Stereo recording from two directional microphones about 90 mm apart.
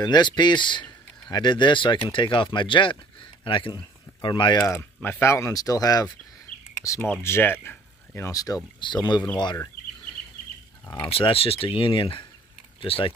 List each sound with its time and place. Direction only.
0.0 s speech: 55° left (ahead or behind)
4.6 s speech: 30° left (ahead or behind); by 6.1 s 45° left (ahead or behind)
7.0 s speech: 25° left (ahead or behind)
8.3 s speech: 40° left (ahead or behind)
8.8 s speech: 55° left (ahead or behind)
11.1 s speech: 90° left; by 12.3 s 70° left (ahead or behind)
12.8 s speech: 90° left